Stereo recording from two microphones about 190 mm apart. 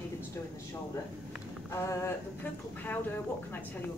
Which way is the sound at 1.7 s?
15° left (ahead or behind).